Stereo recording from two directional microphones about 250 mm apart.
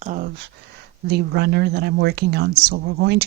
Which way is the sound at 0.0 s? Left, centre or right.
Right.